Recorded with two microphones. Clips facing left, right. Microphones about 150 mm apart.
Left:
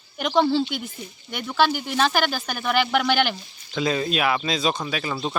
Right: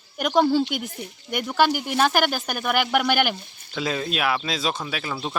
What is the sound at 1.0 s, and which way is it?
Speech, 65° right (ahead or behind).